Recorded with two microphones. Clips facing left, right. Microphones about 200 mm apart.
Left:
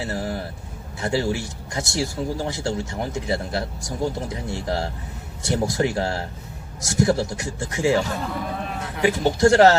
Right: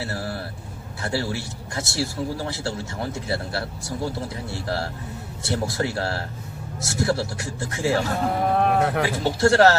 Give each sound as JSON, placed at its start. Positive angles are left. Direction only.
{"t": 0.0, "sound": "speech", "side_deg": 15}
{"t": 8.5, "sound": "cattle", "side_deg": -60}
{"t": 9.0, "sound": "speech", "side_deg": 15}